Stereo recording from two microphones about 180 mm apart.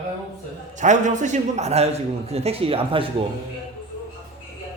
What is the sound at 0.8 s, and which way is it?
A man's voice, 45° right (ahead or behind).